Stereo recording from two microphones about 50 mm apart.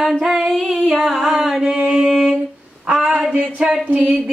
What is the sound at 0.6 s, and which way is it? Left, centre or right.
Female singing, centre.